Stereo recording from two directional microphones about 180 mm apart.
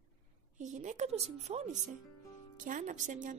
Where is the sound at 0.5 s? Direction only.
40° right (ahead or behind).